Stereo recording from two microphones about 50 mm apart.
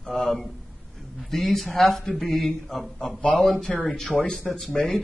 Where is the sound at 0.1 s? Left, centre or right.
Centre.